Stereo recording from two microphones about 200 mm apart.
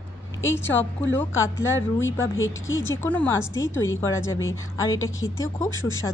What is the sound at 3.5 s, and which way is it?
Speech, 70° left (ahead or behind).